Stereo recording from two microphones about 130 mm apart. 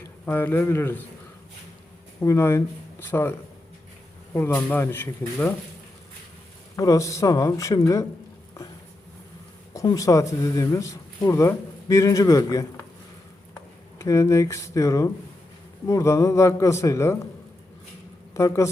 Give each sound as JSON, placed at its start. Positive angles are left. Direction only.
{"t": 0.3, "sound": "a man's voice", "side_deg": 15}
{"t": 2.2, "sound": "speech", "side_deg": 20}
{"t": 4.4, "sound": "a man's voice", "side_deg": 15}
{"t": 6.7, "sound": "speech", "side_deg": 25}
{"t": 9.7, "sound": "speech", "side_deg": 25}
{"t": 14.0, "sound": "speech", "side_deg": 25}
{"t": 18.3, "sound": "speech", "side_deg": 25}